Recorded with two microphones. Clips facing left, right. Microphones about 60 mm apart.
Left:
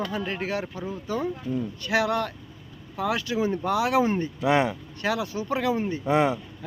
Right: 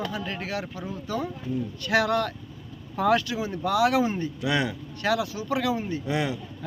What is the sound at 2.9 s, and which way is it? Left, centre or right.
Speech, centre.